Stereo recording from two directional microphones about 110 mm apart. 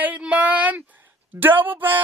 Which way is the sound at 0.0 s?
15° right (ahead or behind).